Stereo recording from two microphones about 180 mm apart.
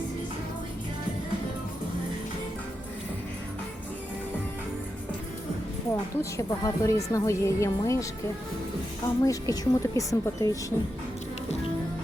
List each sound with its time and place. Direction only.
5.9 s a woman's voice: 15° left (ahead or behind)
9.2 s a woman's voice: 20° left (ahead or behind)